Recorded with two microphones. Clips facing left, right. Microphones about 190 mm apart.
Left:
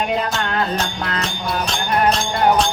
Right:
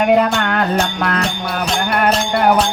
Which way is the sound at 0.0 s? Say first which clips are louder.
Right 8 dB; 65° right (ahead or behind).